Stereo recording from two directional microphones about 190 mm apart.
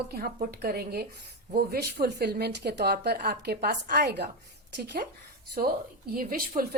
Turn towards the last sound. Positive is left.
turn(degrees=-50)  # may be behind; listen again after turning